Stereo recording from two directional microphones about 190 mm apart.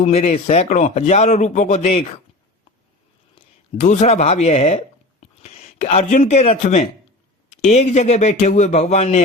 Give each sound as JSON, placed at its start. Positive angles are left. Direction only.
{"t": 0.0, "sound": "a man's voice", "side_deg": 35}
{"t": 3.3, "sound": "a man's voice", "side_deg": 30}